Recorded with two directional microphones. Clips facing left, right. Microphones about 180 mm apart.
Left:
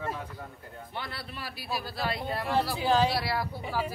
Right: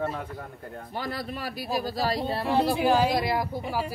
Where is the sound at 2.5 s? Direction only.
15° right (ahead or behind).